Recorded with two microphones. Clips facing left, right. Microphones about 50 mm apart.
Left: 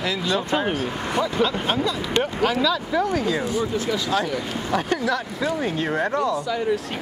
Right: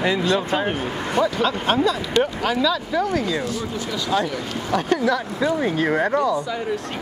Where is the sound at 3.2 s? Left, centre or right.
Centre.